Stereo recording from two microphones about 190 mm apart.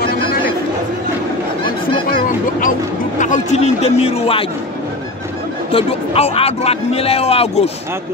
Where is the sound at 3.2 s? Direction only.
40° left (ahead or behind).